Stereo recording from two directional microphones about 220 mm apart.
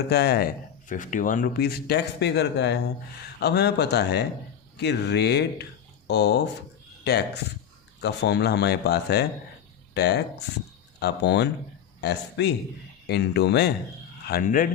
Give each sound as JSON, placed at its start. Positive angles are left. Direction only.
{"t": 0.1, "sound": "speech", "side_deg": 45}